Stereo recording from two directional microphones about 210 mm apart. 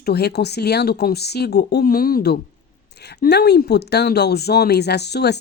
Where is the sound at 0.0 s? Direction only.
50° left (ahead or behind).